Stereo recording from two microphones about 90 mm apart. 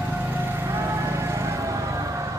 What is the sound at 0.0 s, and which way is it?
Vehicle, 25° right (ahead or behind).